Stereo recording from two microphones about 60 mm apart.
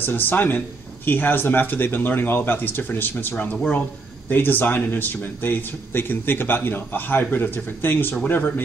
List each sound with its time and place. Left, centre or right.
0.0 s speech: left
3.3 s speech: left
4.3 s speech: left